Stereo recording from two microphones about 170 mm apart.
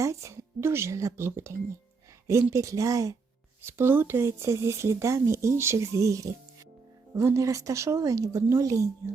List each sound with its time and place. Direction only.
0.0 s speech: 20° right (ahead or behind)